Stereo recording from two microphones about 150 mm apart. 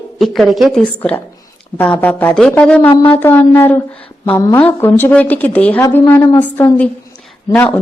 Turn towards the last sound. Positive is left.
turn(degrees=10)  # may be behind; listen again after turning